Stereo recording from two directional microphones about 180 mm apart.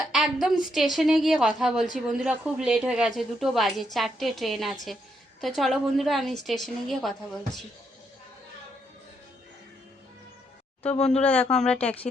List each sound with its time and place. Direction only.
0.1 s a woman's voice: centre (ahead or behind)
10.9 s speech: 35° left (ahead or behind)
11.2 s a woman's voice: 5° left (ahead or behind)